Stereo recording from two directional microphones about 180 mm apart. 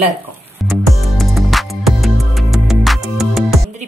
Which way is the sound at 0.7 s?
Centre (ahead or behind).